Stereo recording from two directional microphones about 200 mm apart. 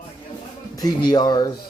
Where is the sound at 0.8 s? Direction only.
20° left (ahead or behind).